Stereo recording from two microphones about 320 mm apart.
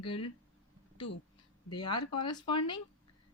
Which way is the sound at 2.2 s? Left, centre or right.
Centre.